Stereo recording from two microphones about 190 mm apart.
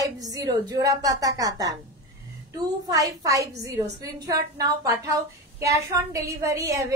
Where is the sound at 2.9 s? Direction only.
20° right (ahead or behind).